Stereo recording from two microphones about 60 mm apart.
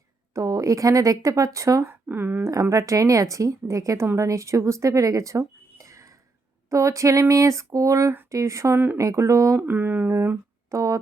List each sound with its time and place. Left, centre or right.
0.3 s speech: right
1.9 s speech: right
2.5 s speech: right
9.6 s a sound: right
10.1 s speech: right